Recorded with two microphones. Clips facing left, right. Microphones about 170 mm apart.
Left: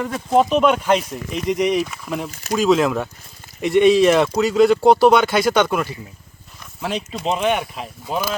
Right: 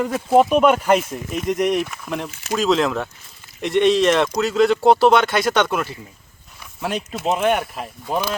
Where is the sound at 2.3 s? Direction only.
40° left (ahead or behind).